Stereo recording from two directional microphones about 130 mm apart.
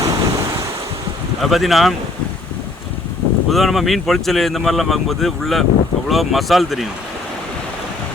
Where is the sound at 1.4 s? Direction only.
Centre (ahead or behind).